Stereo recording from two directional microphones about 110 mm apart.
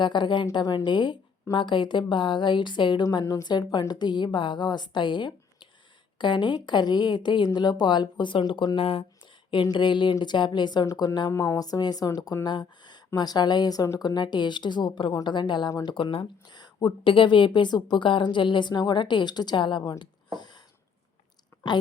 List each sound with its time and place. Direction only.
0.0 s a woman's voice: 45° left (ahead or behind)
12.5 s a sound: 40° left (ahead or behind)
13.1 s a woman's voice: 40° left (ahead or behind)